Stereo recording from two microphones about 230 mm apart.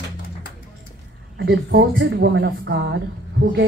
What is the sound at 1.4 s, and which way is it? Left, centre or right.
A woman's voice, right.